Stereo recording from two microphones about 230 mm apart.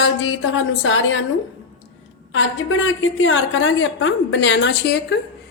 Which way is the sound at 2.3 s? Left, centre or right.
Left.